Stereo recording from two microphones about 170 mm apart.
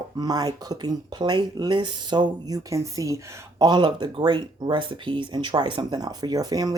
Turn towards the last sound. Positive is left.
turn(degrees=-20)  # may be behind; listen again after turning